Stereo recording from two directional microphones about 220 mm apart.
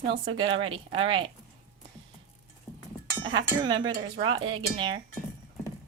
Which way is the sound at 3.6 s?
20° right (ahead or behind).